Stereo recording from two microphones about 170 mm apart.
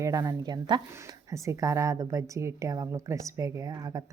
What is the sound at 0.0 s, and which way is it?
Speech, 20° right (ahead or behind).